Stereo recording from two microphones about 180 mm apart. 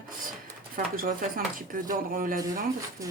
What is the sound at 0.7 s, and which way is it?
Speech, 50° right (ahead or behind).